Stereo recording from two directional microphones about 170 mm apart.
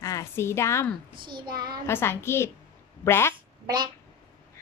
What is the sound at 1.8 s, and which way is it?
A woman's voice, 15° left (ahead or behind).